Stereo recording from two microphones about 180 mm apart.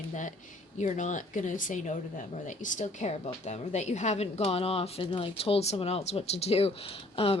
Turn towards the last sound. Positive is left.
turn(degrees=30)  # may be behind; listen again after turning